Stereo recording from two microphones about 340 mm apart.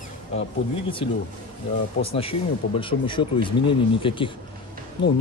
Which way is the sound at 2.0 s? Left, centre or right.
Centre.